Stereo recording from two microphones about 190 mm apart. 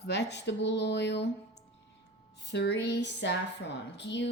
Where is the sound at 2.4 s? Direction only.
65° left (ahead or behind).